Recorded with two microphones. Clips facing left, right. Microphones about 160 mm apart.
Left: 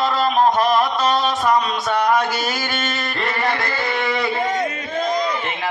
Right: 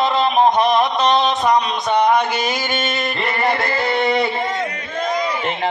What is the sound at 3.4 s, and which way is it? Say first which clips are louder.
Music: right 5 dB; 25° right (ahead or behind).